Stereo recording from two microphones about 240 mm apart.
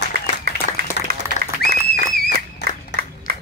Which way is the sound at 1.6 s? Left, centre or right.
Left.